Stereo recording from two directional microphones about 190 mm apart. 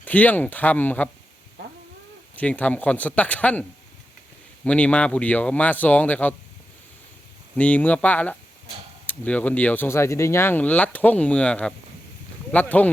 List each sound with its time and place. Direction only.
0.0 s speech: 10° left (ahead or behind)
2.3 s speech: 10° left (ahead or behind)
7.5 s speech: 10° left (ahead or behind)